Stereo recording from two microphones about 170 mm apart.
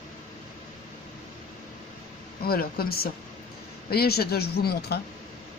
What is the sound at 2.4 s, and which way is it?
A woman's voice, 65° left (ahead or behind).